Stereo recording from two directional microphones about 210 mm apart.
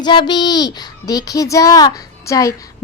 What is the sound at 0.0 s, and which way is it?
A child's voice, 20° left (ahead or behind).